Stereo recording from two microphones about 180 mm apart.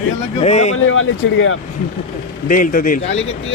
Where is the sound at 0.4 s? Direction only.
40° left (ahead or behind).